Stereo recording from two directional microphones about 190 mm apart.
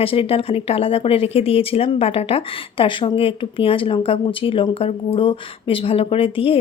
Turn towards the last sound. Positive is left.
turn(degrees=30)  # may be behind; listen again after turning